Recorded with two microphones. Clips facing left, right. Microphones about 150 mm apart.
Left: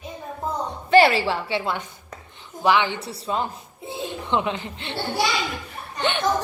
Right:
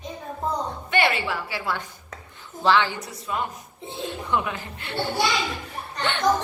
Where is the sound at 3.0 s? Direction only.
30° left (ahead or behind).